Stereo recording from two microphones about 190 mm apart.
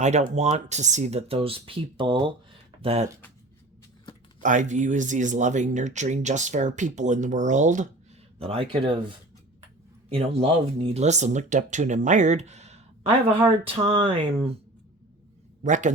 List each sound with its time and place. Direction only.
0.0 s speech: 35° right (ahead or behind)
4.4 s speech: 40° right (ahead or behind)
15.6 s speech: 40° right (ahead or behind)